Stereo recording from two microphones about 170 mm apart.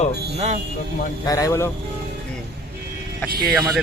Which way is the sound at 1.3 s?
20° left (ahead or behind).